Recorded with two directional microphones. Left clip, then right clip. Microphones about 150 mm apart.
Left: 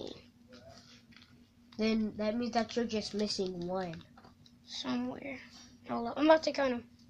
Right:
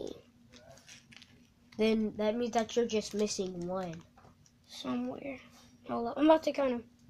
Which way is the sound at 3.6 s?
10° right (ahead or behind).